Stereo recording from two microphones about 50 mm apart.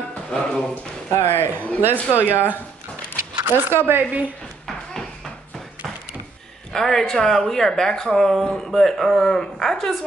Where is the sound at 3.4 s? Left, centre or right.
Right.